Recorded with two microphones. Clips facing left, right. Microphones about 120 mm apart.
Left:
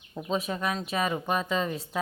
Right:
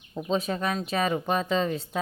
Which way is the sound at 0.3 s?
30° right (ahead or behind).